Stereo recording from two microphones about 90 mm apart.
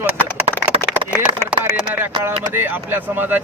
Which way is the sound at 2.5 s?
25° right (ahead or behind).